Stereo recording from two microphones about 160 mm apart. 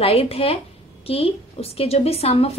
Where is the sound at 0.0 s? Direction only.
35° left (ahead or behind).